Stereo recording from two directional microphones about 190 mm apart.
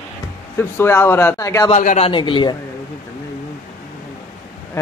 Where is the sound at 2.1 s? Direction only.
25° left (ahead or behind).